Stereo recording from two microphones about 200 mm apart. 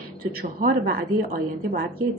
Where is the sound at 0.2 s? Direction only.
50° right (ahead or behind).